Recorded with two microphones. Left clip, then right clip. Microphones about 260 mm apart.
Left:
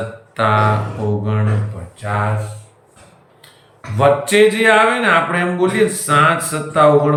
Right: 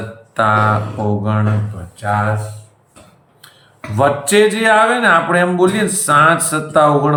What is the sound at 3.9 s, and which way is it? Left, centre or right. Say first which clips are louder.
Mantra: even; centre.